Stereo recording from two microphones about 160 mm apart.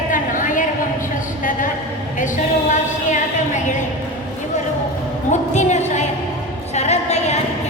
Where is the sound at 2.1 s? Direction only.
50° left (ahead or behind).